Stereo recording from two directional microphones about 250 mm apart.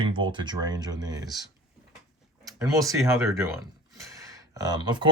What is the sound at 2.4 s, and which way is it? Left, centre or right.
Speech, centre.